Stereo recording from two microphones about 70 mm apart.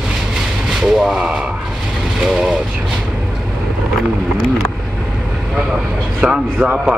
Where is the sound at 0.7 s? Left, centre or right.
Centre.